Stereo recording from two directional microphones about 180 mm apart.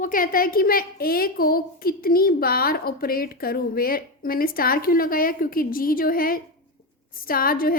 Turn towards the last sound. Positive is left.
turn(degrees=55)  # may be behind; listen again after turning